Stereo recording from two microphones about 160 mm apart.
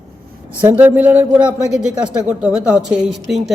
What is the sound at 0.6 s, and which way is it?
A man's voice, 10° right (ahead or behind).